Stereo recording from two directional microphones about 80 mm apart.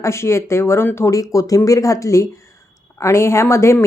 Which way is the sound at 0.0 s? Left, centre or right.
Left.